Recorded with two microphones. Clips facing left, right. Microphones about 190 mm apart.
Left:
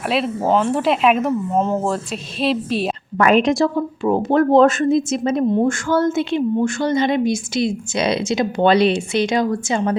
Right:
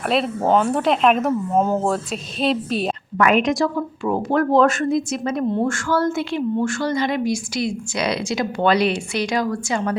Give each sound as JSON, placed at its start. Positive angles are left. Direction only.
{"t": 0.0, "sound": "speech", "side_deg": 0}
{"t": 3.2, "sound": "a woman's voice", "side_deg": 30}